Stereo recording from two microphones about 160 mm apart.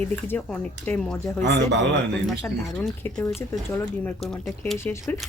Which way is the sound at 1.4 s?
90° right.